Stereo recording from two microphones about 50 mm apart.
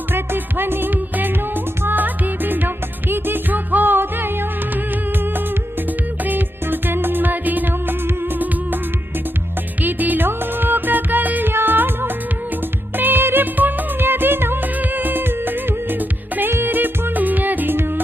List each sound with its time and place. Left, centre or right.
0.1 s music: right
6.2 s music: right
9.8 s music: right